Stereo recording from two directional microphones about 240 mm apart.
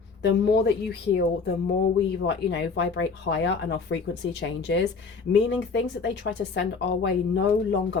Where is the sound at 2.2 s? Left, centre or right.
Left.